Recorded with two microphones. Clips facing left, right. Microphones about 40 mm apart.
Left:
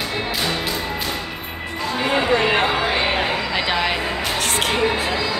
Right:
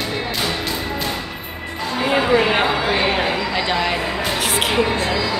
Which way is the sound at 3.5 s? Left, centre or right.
Centre.